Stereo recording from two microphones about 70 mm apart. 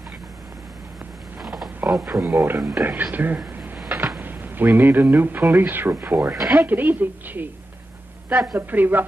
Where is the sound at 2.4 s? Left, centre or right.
Right.